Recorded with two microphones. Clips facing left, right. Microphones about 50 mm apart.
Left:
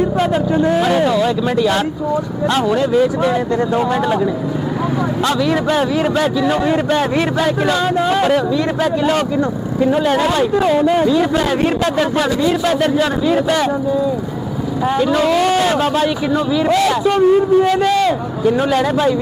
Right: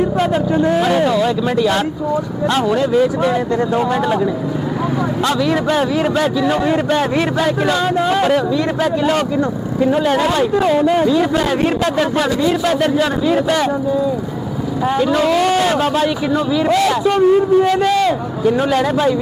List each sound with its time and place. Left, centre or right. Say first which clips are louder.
0.2 s a man's voice: even; centre
14.8 s a man's voice: even; centre